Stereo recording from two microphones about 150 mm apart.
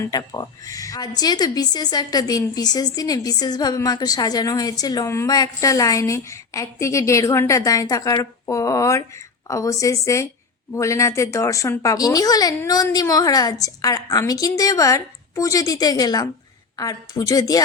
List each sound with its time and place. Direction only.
0.0 s a woman's voice: 25° left (ahead or behind)